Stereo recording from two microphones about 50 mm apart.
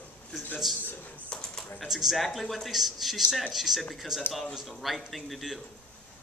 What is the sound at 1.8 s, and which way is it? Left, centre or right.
Speech, centre.